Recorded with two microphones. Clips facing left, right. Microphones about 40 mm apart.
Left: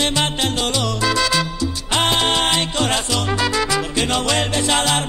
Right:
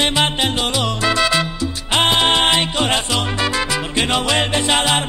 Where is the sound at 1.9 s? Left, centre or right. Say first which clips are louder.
Right 3 dB; centre.